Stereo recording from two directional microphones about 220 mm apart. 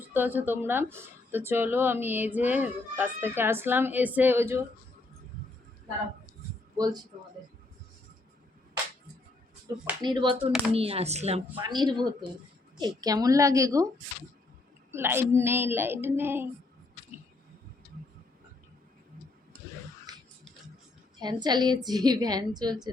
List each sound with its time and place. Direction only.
0.1 s speech: 10° right (ahead or behind)
6.7 s speech: 15° right (ahead or behind)
10.0 s speech: 20° right (ahead or behind)
14.9 s speech: 10° right (ahead or behind)
20.1 s music: 20° right (ahead or behind)
21.2 s speech: 20° right (ahead or behind)